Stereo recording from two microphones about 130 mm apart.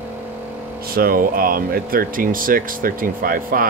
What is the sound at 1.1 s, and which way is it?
Speech, 90° right.